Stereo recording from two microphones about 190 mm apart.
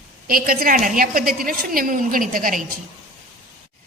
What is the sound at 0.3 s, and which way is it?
A woman's voice, 50° right (ahead or behind).